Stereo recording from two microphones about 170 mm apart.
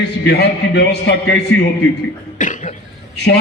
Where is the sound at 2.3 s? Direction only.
50° left (ahead or behind).